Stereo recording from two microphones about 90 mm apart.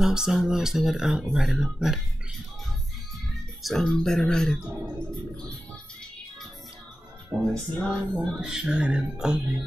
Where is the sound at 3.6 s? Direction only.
5° left (ahead or behind).